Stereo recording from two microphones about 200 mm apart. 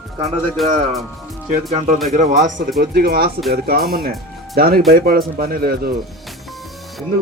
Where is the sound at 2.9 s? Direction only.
50° right (ahead or behind).